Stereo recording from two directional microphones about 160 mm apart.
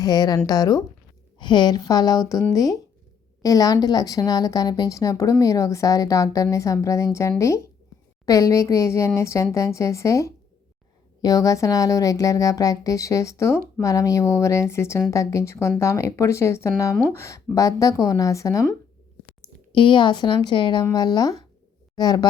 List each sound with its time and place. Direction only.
0.0 s a woman's voice: 25° left (ahead or behind)
19.4 s speech: 30° left (ahead or behind)